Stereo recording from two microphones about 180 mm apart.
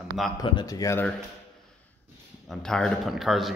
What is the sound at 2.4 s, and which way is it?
A man's voice, 5° left (ahead or behind).